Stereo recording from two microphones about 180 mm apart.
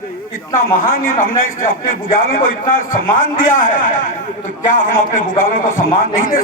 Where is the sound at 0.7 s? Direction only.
50° left (ahead or behind).